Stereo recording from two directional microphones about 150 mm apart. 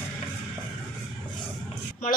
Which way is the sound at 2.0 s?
65° left (ahead or behind).